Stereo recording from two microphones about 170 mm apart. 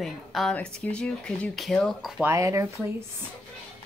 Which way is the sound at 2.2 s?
15° right (ahead or behind).